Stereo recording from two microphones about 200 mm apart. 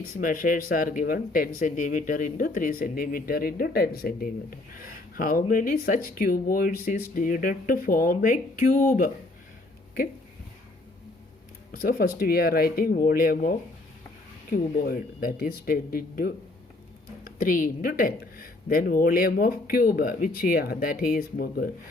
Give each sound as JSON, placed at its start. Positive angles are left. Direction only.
{"t": 0.2, "sound": "speech", "side_deg": 40}
{"t": 11.7, "sound": "speech", "side_deg": 45}